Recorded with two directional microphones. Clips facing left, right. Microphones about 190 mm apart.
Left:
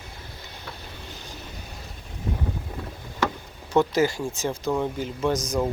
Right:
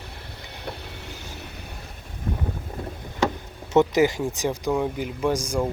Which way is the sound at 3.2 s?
20° right (ahead or behind).